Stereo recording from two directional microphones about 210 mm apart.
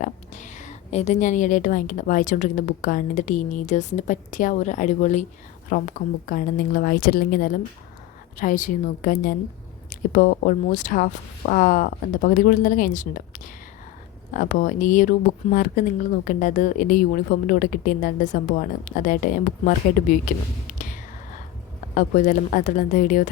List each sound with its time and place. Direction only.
0.0 s speech: 35° left (ahead or behind)
20.7 s whispering: 40° left (ahead or behind)
21.9 s speech: 35° left (ahead or behind)